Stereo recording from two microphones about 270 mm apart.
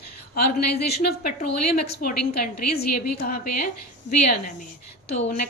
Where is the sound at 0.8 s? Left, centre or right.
Left.